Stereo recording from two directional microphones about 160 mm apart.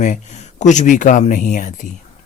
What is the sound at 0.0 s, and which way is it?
Speech, 50° left (ahead or behind).